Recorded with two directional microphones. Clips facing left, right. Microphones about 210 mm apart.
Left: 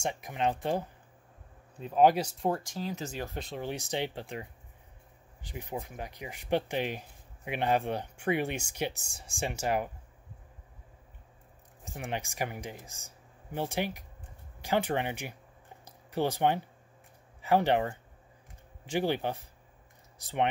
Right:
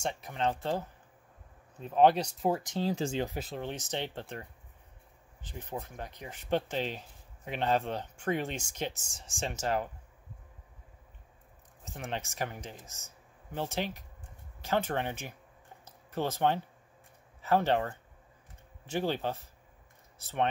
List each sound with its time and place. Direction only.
0.0 s speech: 15° left (ahead or behind); by 2.6 s centre (ahead or behind)
2.6 s speech: 25° right (ahead or behind)
3.3 s speech: 5° right (ahead or behind)
3.7 s speech: 10° left (ahead or behind)
11.8 s speech: 10° left (ahead or behind)
15.8 s a sound: 15° left (ahead or behind)
17.4 s speech: 15° left (ahead or behind)